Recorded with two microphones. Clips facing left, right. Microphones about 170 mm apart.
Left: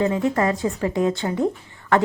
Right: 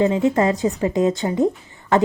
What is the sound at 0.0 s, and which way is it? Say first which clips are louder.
A woman's voice: right 3 dB; 20° right (ahead or behind).